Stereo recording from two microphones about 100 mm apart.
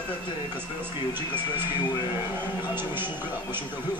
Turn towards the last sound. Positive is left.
turn(degrees=-20)  # may be behind; listen again after turning